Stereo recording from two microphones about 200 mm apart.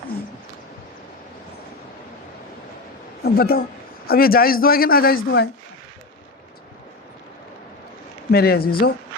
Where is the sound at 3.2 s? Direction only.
50° left (ahead or behind).